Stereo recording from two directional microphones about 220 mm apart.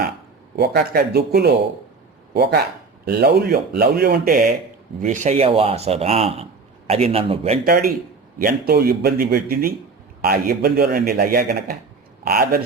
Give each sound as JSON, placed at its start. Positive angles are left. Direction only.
{"t": 0.5, "sound": "a man's voice", "side_deg": -50}
{"t": 7.6, "sound": "a man's voice", "side_deg": -40}